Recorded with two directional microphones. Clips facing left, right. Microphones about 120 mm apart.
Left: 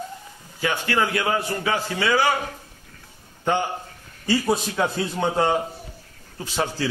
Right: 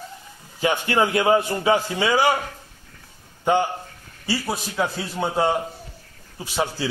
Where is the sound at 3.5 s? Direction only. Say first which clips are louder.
Right 3 dB; 15° right (ahead or behind).